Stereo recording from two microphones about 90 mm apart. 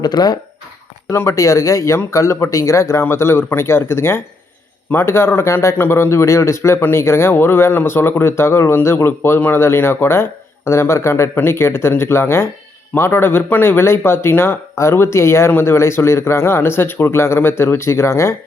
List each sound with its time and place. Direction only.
0.0 s speech: 50° left (ahead or behind)
1.1 s speech: 30° left (ahead or behind)